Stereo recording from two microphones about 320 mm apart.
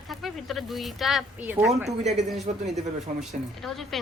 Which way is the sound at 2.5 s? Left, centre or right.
Right.